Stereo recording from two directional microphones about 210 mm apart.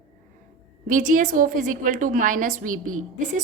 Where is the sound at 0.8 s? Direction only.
40° right (ahead or behind).